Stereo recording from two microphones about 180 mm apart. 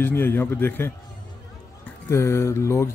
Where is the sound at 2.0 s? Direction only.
15° left (ahead or behind).